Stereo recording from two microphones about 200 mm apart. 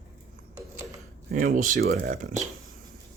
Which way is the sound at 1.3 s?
40° right (ahead or behind).